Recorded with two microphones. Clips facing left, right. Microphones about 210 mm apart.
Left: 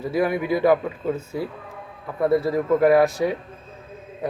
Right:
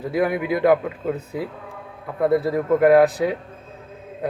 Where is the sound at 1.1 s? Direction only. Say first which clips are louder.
Even; 15° right (ahead or behind).